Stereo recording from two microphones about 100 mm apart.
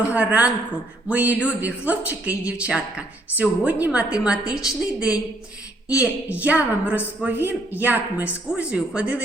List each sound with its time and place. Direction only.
0.1 s speech: 15° right (ahead or behind)